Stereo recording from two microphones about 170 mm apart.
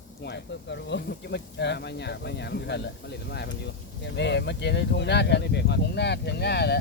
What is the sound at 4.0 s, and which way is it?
Speech, 90° left.